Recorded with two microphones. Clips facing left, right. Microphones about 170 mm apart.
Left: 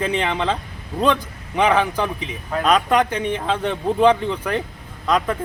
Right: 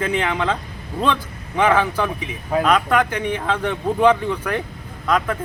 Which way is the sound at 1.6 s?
15° left (ahead or behind).